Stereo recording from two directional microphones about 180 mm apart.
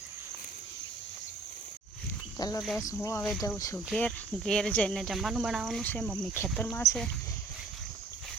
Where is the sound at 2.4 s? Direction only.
20° left (ahead or behind).